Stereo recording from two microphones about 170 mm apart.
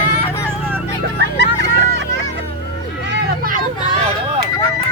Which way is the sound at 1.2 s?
85° right.